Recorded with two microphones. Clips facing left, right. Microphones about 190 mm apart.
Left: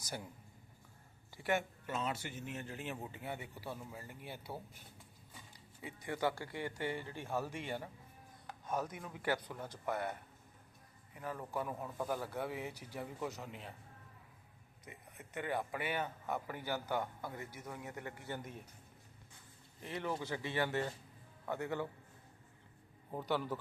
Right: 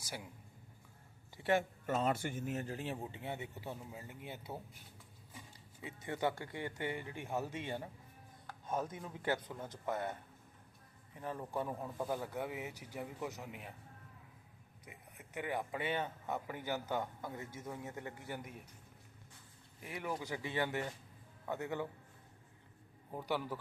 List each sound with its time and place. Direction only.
0.0 s speech: 5° right (ahead or behind)
1.4 s speech: 30° right (ahead or behind)
1.9 s speech: 50° right (ahead or behind); by 4.5 s 20° right (ahead or behind)
5.8 s speech: 25° right (ahead or behind)
11.2 s speech: 25° right (ahead or behind)
14.8 s speech: 10° right (ahead or behind)
18.3 s speech: 10° right (ahead or behind)
19.8 s speech: 10° right (ahead or behind)
23.1 s speech: 10° right (ahead or behind)